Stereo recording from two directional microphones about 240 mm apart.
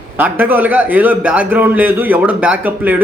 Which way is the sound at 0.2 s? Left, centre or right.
Centre.